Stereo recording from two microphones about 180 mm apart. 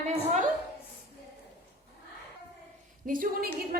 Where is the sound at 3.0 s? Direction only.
50° right (ahead or behind).